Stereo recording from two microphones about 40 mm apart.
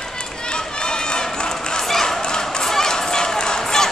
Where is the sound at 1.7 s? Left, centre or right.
Centre.